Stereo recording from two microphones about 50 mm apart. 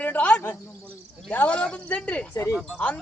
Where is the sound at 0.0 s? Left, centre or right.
Left.